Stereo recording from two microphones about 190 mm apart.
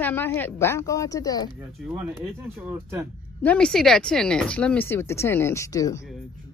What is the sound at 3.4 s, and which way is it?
Speech, 5° left (ahead or behind).